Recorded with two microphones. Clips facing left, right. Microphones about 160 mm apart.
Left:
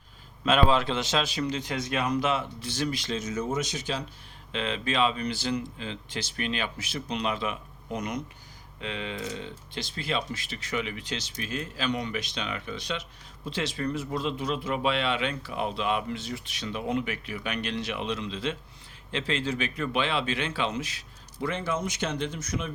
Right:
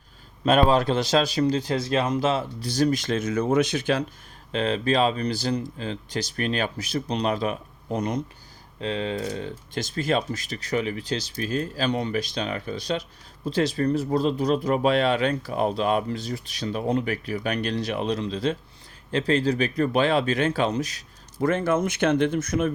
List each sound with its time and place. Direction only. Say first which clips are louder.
0.4 s speech: right 4 dB; 40° right (ahead or behind); by 4.0 s 60° right (ahead or behind)
4.5 s speech: right 6 dB; 40° right (ahead or behind)